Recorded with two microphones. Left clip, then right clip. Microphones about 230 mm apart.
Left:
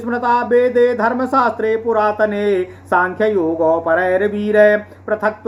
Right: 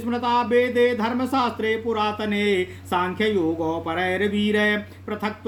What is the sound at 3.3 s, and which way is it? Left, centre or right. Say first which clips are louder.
Speech: left 8 dB; right.